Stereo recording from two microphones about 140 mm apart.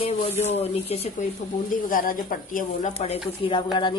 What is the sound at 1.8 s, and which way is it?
Speech, 85° left.